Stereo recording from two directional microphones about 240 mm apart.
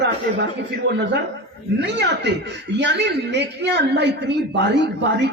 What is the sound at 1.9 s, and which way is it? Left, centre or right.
A woman's voice, right.